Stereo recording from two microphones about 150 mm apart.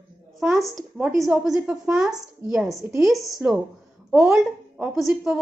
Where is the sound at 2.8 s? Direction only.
15° right (ahead or behind).